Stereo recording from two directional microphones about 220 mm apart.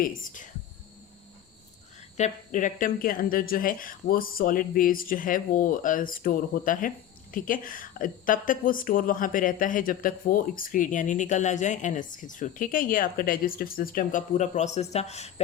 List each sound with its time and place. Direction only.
0.0 s speech: 40° left (ahead or behind)
2.1 s speech: 35° left (ahead or behind)